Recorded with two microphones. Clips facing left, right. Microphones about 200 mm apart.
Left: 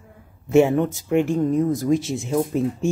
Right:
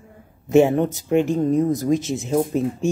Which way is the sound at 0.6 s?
40° right (ahead or behind).